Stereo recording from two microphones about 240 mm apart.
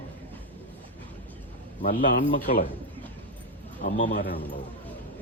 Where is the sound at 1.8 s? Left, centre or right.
Left.